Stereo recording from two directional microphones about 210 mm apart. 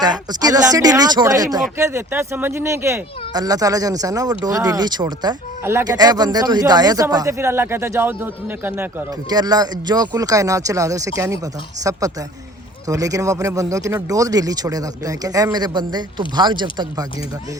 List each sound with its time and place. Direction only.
0.0 s speech: 20° right (ahead or behind)